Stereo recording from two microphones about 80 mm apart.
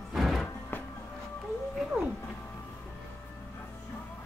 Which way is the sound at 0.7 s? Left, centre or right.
Left.